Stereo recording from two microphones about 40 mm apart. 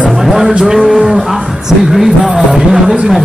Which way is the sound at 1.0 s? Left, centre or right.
Centre.